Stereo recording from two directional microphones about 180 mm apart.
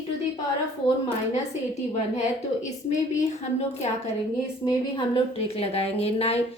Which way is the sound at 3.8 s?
40° left (ahead or behind).